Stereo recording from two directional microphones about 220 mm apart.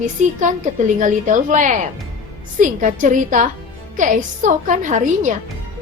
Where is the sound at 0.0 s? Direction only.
35° right (ahead or behind).